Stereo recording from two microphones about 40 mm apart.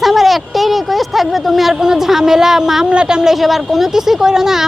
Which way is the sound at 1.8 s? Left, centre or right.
Centre.